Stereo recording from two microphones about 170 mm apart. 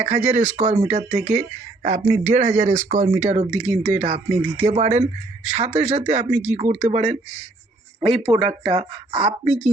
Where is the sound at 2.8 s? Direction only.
50° right (ahead or behind).